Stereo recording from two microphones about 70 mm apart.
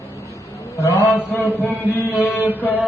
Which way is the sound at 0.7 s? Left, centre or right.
Left.